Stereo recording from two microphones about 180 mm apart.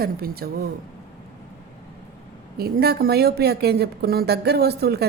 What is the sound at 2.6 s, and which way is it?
A woman's voice, 60° right (ahead or behind).